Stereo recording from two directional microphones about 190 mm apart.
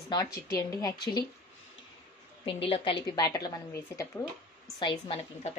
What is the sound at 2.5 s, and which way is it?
A woman's voice, 30° left (ahead or behind).